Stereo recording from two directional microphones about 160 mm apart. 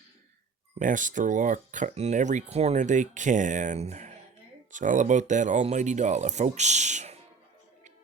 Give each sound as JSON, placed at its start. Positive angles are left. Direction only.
{"t": 0.8, "sound": "speech", "side_deg": -55}